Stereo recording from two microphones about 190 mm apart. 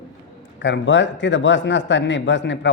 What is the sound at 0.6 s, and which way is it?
A man's voice, 70° left (ahead or behind).